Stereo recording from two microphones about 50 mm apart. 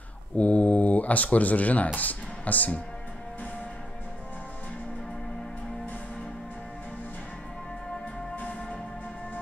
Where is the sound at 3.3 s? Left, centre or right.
Left.